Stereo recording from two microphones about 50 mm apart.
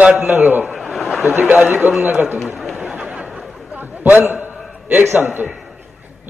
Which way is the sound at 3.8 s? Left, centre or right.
Right.